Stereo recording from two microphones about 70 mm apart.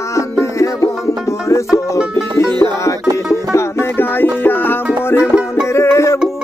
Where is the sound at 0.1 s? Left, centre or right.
Left.